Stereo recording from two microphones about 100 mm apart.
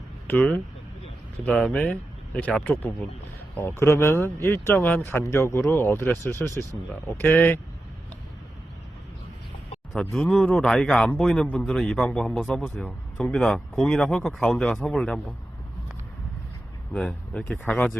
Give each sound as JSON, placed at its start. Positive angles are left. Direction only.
{"t": 0.3, "sound": "speech", "side_deg": 15}
{"t": 3.5, "sound": "speech", "side_deg": 25}
{"t": 9.9, "sound": "speech", "side_deg": 5}
{"t": 12.6, "sound": "speech", "side_deg": 15}
{"t": 13.3, "sound": "speech", "side_deg": 5}
{"t": 16.9, "sound": "speech", "side_deg": 10}